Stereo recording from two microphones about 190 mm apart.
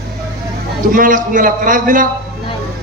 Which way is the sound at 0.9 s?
45° right (ahead or behind).